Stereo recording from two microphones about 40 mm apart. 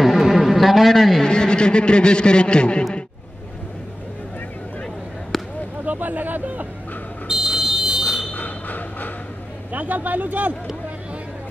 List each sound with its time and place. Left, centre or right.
0.0 s a sound: centre
1.2 s a man's voice: left
5.3 s basketball bounce: centre
5.9 s speech: right
7.2 s smoke detector: centre
8.4 s a sound: left
9.7 s speech: right